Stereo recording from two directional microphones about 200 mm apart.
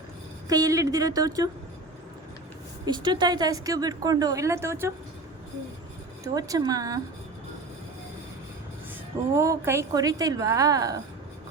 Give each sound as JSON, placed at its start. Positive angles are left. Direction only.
{"t": 0.4, "sound": "a woman's voice", "side_deg": -20}
{"t": 2.8, "sound": "a woman's voice", "side_deg": -20}
{"t": 6.2, "sound": "a woman's voice", "side_deg": -20}
{"t": 9.3, "sound": "a woman's voice", "side_deg": -15}